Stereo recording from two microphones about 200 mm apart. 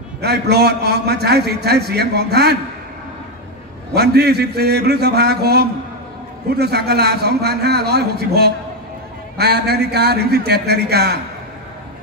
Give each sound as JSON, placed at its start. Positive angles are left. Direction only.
{"t": 0.2, "sound": "a man's voice", "side_deg": -55}
{"t": 3.9, "sound": "a man's voice", "side_deg": -55}